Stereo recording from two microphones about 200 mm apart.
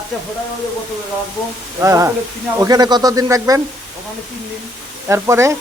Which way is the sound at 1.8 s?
10° right (ahead or behind).